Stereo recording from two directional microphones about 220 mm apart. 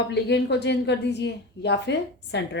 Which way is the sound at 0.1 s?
50° left (ahead or behind).